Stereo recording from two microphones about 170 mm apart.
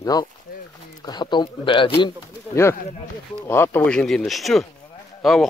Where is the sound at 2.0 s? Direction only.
15° left (ahead or behind).